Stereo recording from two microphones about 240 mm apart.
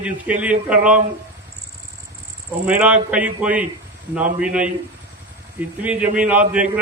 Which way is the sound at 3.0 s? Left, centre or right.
Centre.